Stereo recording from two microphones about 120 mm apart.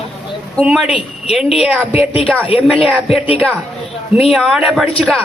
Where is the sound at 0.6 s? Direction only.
5° right (ahead or behind).